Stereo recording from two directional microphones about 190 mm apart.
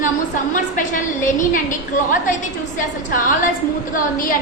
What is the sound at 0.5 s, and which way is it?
A woman's voice, 45° left (ahead or behind).